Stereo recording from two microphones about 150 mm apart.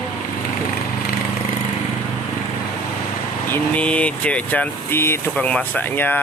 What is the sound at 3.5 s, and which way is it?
Speech, 10° left (ahead or behind).